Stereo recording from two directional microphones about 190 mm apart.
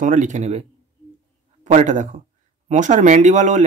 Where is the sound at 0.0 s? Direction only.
40° right (ahead or behind).